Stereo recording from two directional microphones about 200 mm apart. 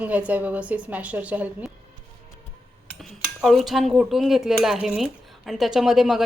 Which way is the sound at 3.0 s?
Centre (ahead or behind).